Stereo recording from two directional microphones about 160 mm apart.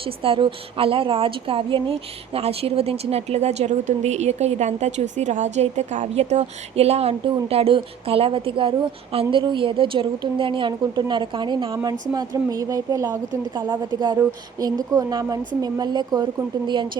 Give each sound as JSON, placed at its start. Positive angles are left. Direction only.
{"t": 0.0, "sound": "a woman's voice", "side_deg": -35}